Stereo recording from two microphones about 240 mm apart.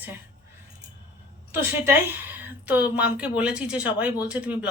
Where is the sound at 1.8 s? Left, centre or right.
Centre.